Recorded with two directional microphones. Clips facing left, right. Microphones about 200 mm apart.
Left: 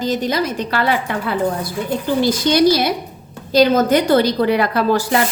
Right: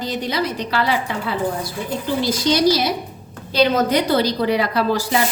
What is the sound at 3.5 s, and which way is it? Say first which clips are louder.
A woman's voice: left 4 dB; 45° left (ahead or behind).